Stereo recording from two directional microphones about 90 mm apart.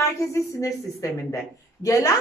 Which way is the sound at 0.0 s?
35° left (ahead or behind).